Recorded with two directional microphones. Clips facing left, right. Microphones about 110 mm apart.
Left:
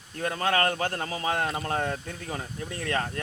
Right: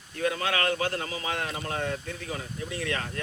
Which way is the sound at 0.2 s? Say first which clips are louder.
Left 2 dB; 40° left (ahead or behind).